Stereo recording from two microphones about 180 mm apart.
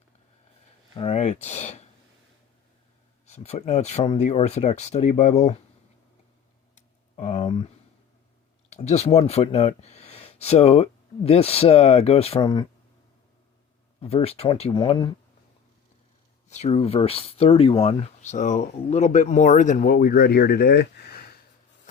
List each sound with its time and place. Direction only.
0.9 s speech: 35° left (ahead or behind)
3.2 s speech: 35° left (ahead or behind)
7.2 s speech: 30° left (ahead or behind)
8.7 s speech: 40° left (ahead or behind)
14.0 s speech: 35° left (ahead or behind)
16.5 s speech: 35° left (ahead or behind); by 21.3 s 60° left (ahead or behind)